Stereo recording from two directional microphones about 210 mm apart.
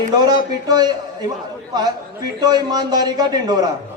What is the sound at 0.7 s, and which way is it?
Speech, 20° right (ahead or behind).